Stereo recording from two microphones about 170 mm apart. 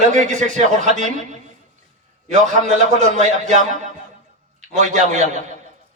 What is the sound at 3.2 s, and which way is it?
A man's voice, 45° right (ahead or behind).